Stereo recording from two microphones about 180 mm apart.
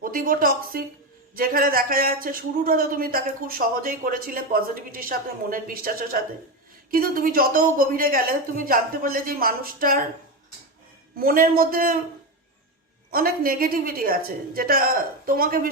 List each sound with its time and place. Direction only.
0.0 s speech: 50° right (ahead or behind)
11.2 s a woman's voice: 55° right (ahead or behind)
13.1 s a woman's voice: 55° right (ahead or behind)